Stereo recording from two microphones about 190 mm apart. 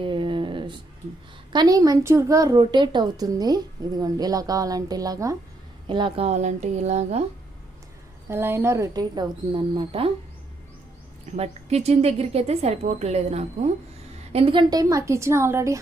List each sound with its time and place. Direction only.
0.0 s a sound: 25° right (ahead or behind)
1.5 s a woman's voice: 20° right (ahead or behind); by 7.2 s 35° right (ahead or behind)
8.3 s a woman's voice: 10° right (ahead or behind); by 10.1 s 30° right (ahead or behind)
11.3 s a woman's voice: 35° right (ahead or behind); by 15.8 s 15° right (ahead or behind)